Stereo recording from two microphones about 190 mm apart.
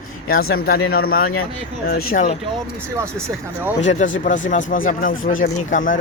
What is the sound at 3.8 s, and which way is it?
Speech, 40° left (ahead or behind).